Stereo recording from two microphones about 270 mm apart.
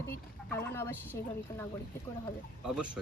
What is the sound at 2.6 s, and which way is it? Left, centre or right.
Speech, centre.